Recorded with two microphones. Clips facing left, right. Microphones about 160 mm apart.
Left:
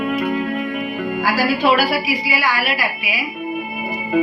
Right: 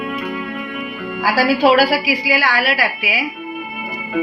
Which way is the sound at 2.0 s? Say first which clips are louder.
Right 2 dB; 90° right.